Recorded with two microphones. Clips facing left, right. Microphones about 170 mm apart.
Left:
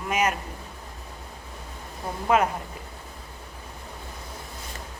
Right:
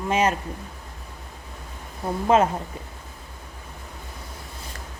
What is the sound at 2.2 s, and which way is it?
Speech, 25° right (ahead or behind).